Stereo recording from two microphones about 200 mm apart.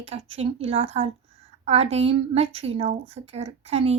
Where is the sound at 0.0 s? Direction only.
30° right (ahead or behind).